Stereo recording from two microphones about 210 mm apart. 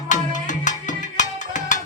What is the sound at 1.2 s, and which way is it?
Music, 35° left (ahead or behind).